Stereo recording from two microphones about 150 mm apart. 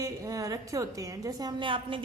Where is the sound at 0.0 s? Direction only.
20° right (ahead or behind).